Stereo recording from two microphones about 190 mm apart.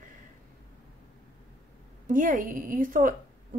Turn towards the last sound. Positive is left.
turn(degrees=-45)  # may be behind; listen again after turning